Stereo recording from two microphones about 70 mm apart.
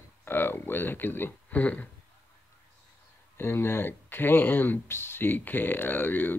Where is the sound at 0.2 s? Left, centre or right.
Left.